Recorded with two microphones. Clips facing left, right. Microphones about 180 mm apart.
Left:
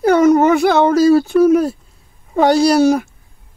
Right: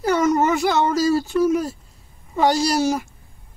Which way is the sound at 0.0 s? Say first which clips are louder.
Left 8 dB; 60° left (ahead or behind).